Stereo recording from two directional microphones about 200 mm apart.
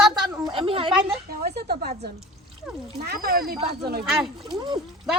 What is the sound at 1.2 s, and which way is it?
Speech, 50° right (ahead or behind).